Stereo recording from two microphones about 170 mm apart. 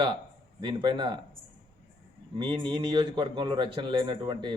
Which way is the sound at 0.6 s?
30° right (ahead or behind).